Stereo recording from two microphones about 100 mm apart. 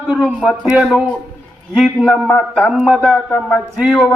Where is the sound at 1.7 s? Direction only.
5° right (ahead or behind).